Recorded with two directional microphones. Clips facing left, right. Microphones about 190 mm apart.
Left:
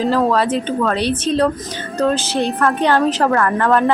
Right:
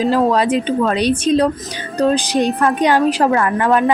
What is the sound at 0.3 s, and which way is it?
A woman's voice, 15° right (ahead or behind).